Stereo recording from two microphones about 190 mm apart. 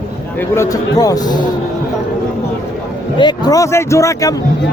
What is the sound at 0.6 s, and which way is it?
Speech, 20° left (ahead or behind).